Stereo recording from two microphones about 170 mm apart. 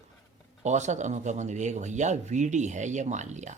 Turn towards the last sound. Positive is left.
turn(degrees=-45)  # may be behind; listen again after turning